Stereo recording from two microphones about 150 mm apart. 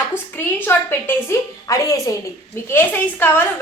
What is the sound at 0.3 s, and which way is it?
A woman's voice, 15° left (ahead or behind).